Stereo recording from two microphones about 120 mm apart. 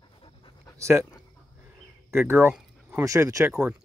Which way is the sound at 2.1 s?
20° right (ahead or behind).